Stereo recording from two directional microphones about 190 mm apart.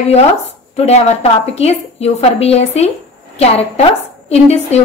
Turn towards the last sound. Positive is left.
turn(degrees=35)  # may be behind; listen again after turning